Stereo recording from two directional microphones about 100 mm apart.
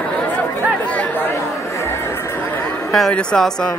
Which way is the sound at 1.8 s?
25° left (ahead or behind).